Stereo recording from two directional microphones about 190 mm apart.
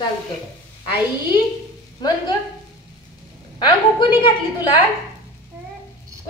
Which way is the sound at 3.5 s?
25° left (ahead or behind).